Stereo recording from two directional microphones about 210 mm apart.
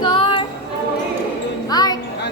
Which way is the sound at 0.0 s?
25° left (ahead or behind).